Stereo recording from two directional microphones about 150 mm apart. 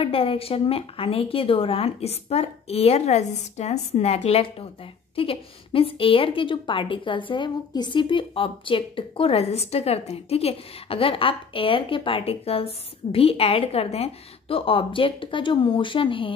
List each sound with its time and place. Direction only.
0.0 s a woman's voice: 35° left (ahead or behind)